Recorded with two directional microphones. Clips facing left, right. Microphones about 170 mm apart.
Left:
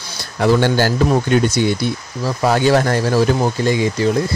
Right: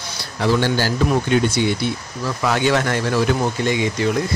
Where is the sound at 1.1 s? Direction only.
40° left (ahead or behind).